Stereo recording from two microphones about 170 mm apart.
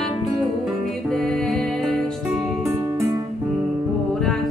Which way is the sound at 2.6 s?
15° right (ahead or behind).